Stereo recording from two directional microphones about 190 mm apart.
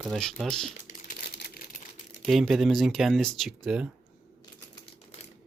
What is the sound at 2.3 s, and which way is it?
Speech, centre (ahead or behind).